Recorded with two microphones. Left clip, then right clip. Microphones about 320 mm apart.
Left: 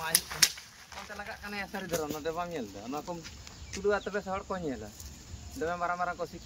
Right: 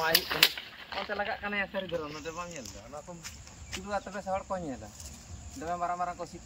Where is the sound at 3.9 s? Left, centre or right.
Centre.